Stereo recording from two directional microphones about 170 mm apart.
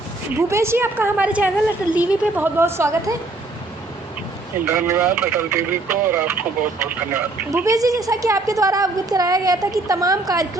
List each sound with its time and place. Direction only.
0.3 s speech: 15° right (ahead or behind)
4.6 s a woman's voice: 15° right (ahead or behind)